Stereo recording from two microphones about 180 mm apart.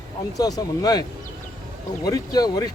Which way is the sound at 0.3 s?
20° left (ahead or behind).